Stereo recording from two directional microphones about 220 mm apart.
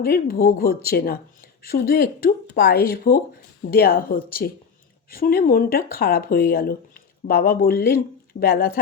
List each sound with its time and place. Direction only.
0.0 s speech: 45° left (ahead or behind)